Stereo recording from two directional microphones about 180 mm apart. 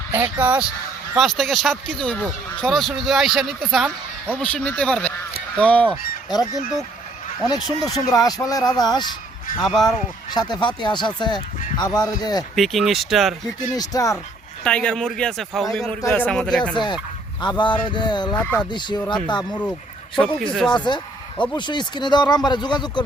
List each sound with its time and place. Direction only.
0.1 s speech: 10° right (ahead or behind); by 5.9 s 5° left (ahead or behind)
7.4 s speech: 20° left (ahead or behind)
9.6 s speech: centre (ahead or behind)
10.3 s speech: 25° left (ahead or behind)
12.5 s speech: centre (ahead or behind)
13.6 s speech: 20° left (ahead or behind)
14.6 s speech: 5° left (ahead or behind)
16.7 s speech: 25° left (ahead or behind)
18.3 s speech: 5° left (ahead or behind)
18.7 s speech: 25° left (ahead or behind)
20.4 s speech: 5° left (ahead or behind)
20.7 s speech: 25° left (ahead or behind)